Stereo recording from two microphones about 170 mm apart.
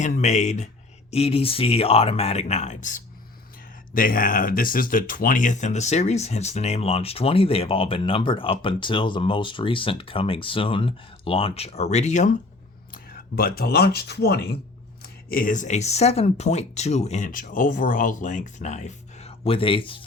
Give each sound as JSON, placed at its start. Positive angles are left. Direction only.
{"t": 0.0, "sound": "speech", "side_deg": 45}
{"t": 12.9, "sound": "speech", "side_deg": 60}
{"t": 15.0, "sound": "speech", "side_deg": 55}